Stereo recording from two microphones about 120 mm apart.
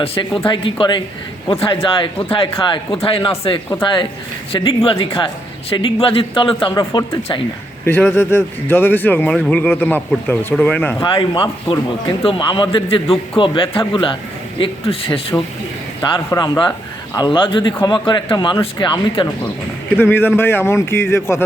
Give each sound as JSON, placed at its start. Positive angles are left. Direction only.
{"t": 0.0, "sound": "a man's voice", "side_deg": 55}
{"t": 7.9, "sound": "speech", "side_deg": 20}
{"t": 11.0, "sound": "a man's voice", "side_deg": 40}
{"t": 16.3, "sound": "a man's voice", "side_deg": 35}
{"t": 20.0, "sound": "a man's voice", "side_deg": 15}